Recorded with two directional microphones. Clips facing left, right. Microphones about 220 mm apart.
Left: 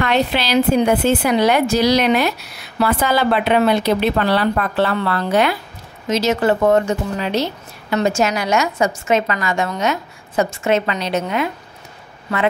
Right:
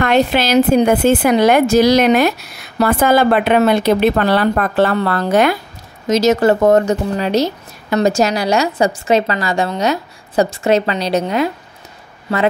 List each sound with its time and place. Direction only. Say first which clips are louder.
0.0 s speech: right 4 dB; 50° right (ahead or behind); by 12.4 s 30° right (ahead or behind)